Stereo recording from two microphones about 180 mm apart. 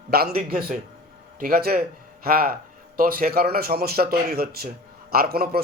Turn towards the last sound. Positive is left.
turn(degrees=-60)  # may be behind; listen again after turning